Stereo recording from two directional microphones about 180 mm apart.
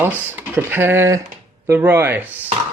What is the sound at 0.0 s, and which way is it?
Speech, 10° right (ahead or behind).